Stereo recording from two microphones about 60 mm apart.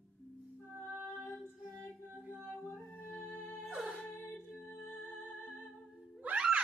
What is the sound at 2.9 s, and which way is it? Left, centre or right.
Music, left.